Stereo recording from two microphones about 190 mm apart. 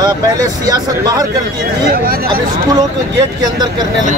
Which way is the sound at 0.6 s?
20° right (ahead or behind).